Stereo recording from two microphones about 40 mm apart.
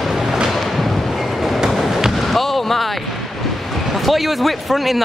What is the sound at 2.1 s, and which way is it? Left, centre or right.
Fireworks, centre.